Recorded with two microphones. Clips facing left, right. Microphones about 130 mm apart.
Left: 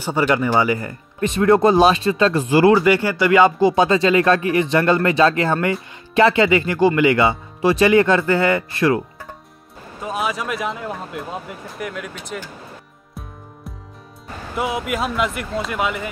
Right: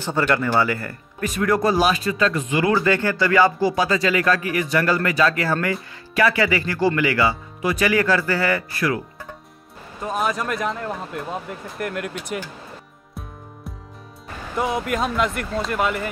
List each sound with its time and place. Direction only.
0.0 s speech: 10° left (ahead or behind); by 2.7 s 35° left (ahead or behind)
2.7 s speech: 15° left (ahead or behind)
9.9 s speech: centre (ahead or behind)
14.6 s speech: 5° left (ahead or behind)